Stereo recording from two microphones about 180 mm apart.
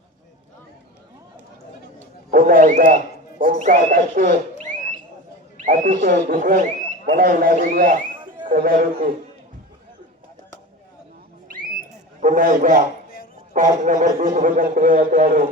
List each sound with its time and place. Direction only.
2.3 s speech: 50° right (ahead or behind)
5.6 s speech: 50° right (ahead or behind)
12.2 s speech: 45° right (ahead or behind)